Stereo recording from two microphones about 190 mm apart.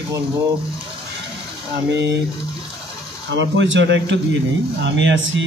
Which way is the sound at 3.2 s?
70° right (ahead or behind).